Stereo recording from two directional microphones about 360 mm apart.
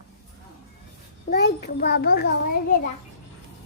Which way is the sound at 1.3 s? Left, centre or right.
Left.